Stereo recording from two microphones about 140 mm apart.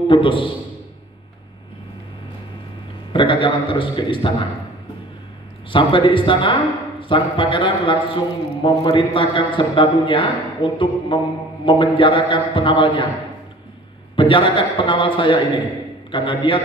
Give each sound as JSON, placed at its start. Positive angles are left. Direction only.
{"t": 0.1, "sound": "a man's voice", "side_deg": 35}
{"t": 3.1, "sound": "a man's voice", "side_deg": 35}
{"t": 5.7, "sound": "a man's voice", "side_deg": 35}
{"t": 14.1, "sound": "a man's voice", "side_deg": 35}